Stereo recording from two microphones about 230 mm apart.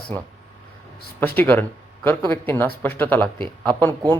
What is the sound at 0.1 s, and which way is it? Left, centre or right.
Speech, centre.